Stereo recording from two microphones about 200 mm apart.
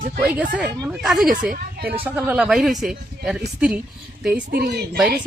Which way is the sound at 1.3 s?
45° right (ahead or behind).